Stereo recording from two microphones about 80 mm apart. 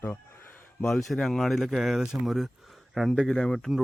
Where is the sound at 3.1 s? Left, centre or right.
Centre.